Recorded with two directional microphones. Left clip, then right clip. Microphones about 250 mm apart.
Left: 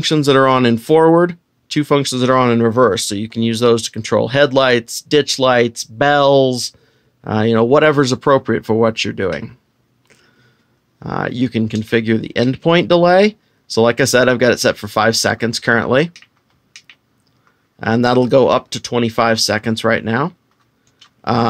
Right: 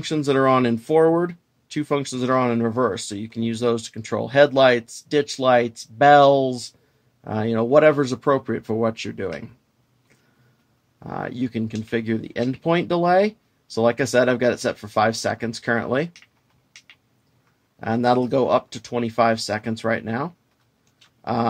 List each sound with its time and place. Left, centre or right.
0.0 s speech: left
11.0 s speech: left
17.7 s speech: left
21.2 s tick-tock: left